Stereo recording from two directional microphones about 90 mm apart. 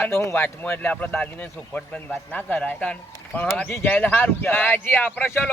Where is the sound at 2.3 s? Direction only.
20° left (ahead or behind).